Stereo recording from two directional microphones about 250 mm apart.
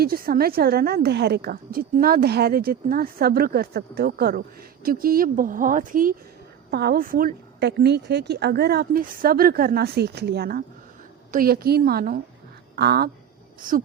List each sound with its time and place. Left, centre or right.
0.0 s a woman's voice: right